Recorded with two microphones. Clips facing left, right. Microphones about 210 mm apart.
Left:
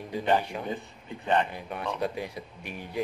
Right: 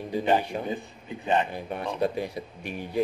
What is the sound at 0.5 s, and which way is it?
Speech, 35° right (ahead or behind).